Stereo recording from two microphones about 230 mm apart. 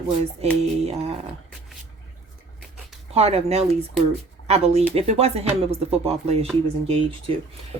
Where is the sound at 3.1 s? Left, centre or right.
Right.